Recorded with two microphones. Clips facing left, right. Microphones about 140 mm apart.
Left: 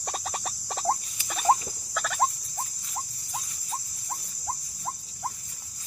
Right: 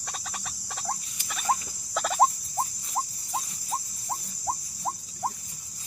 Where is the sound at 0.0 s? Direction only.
40° left (ahead or behind).